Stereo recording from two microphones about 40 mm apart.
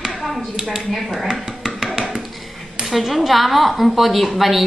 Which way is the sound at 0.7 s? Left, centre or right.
Centre.